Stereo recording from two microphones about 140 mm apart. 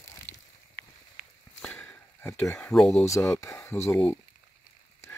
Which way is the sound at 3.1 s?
20° left (ahead or behind).